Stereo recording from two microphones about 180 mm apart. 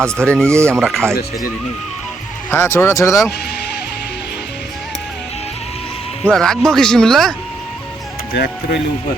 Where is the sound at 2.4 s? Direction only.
15° left (ahead or behind).